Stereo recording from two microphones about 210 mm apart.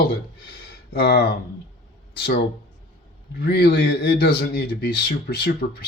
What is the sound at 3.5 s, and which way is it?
Speech, 50° left (ahead or behind).